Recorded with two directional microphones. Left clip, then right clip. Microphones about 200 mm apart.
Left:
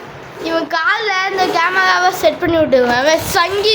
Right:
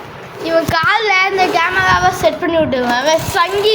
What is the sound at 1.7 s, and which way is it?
A child's voice, 15° left (ahead or behind).